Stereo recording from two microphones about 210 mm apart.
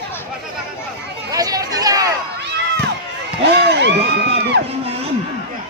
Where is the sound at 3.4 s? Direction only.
50° right (ahead or behind).